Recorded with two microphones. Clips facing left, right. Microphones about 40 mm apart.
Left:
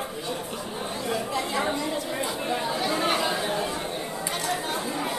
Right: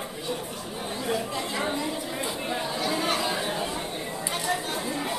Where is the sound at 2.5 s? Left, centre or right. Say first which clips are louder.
Left 2 dB; centre.